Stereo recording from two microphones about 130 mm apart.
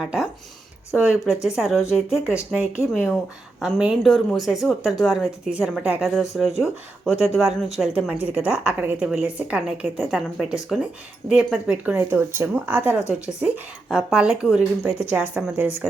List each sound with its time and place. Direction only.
0.0 s speech: 5° right (ahead or behind)
11.9 s speech: 20° right (ahead or behind); by 16.0 s centre (ahead or behind)